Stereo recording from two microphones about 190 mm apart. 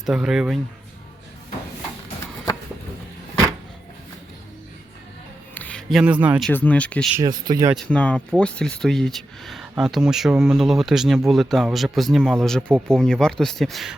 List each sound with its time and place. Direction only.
0.0 s speech: 5° right (ahead or behind)
5.5 s speech: 5° left (ahead or behind)
6.5 s speech: 10° left (ahead or behind)
7.2 s speech: 20° right (ahead or behind)
7.9 s speech: 5° left (ahead or behind)